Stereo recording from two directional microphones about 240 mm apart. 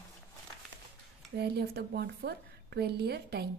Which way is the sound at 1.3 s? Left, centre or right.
Right.